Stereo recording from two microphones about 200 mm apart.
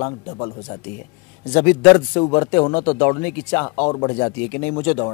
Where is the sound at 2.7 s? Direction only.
30° left (ahead or behind).